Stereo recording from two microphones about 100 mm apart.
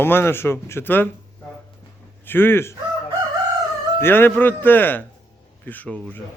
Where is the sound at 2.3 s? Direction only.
20° left (ahead or behind).